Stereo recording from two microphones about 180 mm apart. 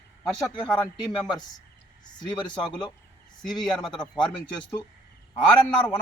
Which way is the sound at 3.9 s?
25° left (ahead or behind).